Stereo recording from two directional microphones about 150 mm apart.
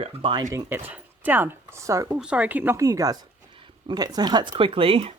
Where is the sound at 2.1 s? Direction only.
5° right (ahead or behind).